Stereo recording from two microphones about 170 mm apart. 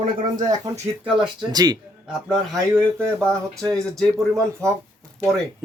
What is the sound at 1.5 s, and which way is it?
Speech, 25° right (ahead or behind).